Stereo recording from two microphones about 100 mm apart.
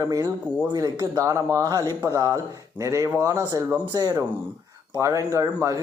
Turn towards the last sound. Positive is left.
turn(degrees=-35)  # may be behind; listen again after turning